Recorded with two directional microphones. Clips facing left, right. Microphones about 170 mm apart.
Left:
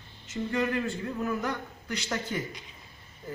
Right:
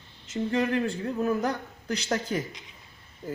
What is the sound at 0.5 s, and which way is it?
Speech, 30° right (ahead or behind).